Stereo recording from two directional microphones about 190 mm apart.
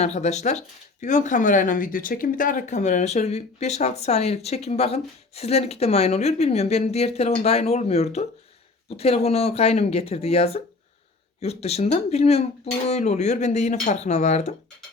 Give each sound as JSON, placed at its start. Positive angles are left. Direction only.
{"t": 0.0, "sound": "speech", "side_deg": 35}